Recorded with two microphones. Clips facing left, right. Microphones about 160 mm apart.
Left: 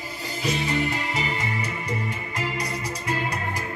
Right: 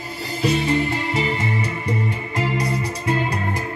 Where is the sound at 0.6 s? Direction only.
30° right (ahead or behind).